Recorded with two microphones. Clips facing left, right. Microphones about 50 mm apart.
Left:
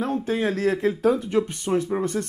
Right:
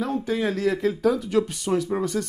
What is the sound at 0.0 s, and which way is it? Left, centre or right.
Speech, left.